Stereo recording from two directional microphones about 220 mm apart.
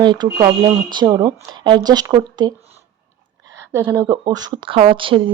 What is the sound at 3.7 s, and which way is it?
Speech, 15° right (ahead or behind).